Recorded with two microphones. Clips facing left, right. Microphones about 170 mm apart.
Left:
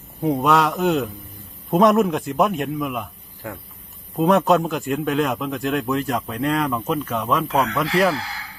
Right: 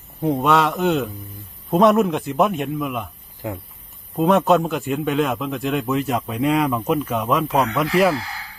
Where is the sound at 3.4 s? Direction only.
20° right (ahead or behind).